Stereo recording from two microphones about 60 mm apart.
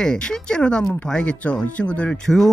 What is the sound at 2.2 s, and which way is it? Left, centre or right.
Speech, centre.